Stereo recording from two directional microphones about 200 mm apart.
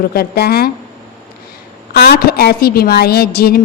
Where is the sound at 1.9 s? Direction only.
50° left (ahead or behind).